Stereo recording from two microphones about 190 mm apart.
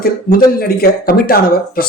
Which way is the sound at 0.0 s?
50° left (ahead or behind).